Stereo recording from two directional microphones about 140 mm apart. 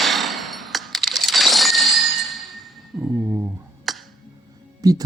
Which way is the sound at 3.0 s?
15° right (ahead or behind).